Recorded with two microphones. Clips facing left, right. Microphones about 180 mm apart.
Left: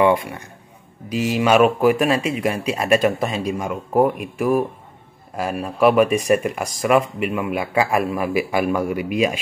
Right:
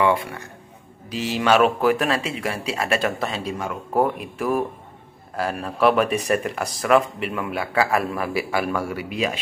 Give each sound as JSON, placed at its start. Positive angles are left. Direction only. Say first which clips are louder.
{"t": 0.0, "sound": "speech", "louder": "left 4 dB", "side_deg": 15}